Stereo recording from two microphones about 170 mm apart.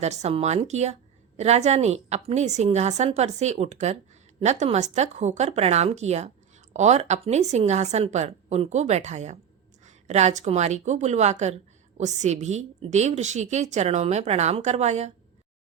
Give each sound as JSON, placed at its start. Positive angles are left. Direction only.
{"t": 0.0, "sound": "a woman's voice", "side_deg": -40}